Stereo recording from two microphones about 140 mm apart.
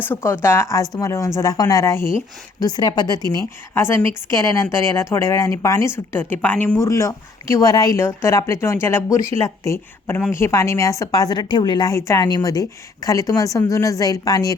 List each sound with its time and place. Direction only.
0.0 s a woman's voice: 15° left (ahead or behind)
3.3 s a woman's voice: 20° left (ahead or behind)